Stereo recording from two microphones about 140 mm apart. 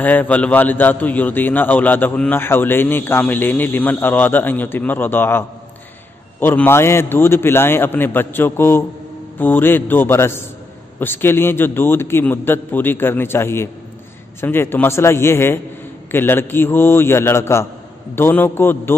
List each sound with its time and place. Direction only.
0.0 s a man's voice: 10° left (ahead or behind)
6.4 s a man's voice: 15° left (ahead or behind)